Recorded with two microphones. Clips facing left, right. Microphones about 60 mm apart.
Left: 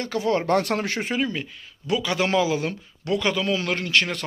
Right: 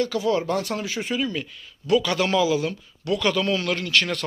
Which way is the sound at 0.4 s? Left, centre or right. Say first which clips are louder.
Left 4 dB; left.